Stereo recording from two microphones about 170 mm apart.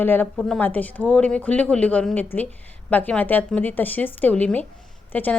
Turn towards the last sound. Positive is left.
turn(degrees=10)  # may be behind; listen again after turning